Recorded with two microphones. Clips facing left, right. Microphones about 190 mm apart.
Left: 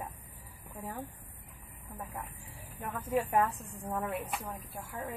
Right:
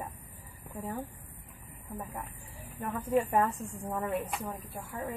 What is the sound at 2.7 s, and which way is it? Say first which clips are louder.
Speech: right 3 dB; centre (ahead or behind).